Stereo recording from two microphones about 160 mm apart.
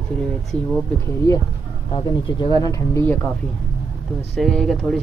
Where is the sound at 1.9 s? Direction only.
25° left (ahead or behind).